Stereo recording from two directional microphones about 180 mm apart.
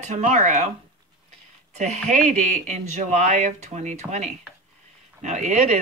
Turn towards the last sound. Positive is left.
turn(degrees=-40)  # may be behind; listen again after turning